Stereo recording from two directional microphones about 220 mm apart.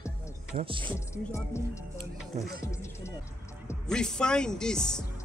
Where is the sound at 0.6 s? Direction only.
25° right (ahead or behind).